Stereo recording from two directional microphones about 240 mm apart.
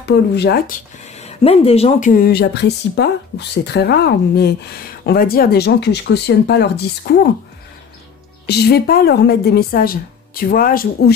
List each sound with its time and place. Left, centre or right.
0.1 s speech: left
1.1 s speech: left
8.5 s speech: left